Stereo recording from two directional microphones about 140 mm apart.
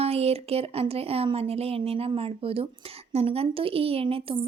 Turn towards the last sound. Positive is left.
turn(degrees=-40)  # may be behind; listen again after turning